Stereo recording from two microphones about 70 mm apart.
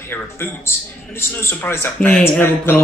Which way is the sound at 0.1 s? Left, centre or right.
Left.